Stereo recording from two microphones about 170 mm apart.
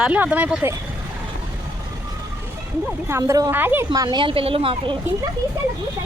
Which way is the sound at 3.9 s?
25° right (ahead or behind).